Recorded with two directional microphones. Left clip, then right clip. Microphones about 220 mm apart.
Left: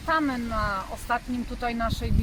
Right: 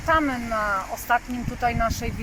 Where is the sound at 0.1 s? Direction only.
10° left (ahead or behind).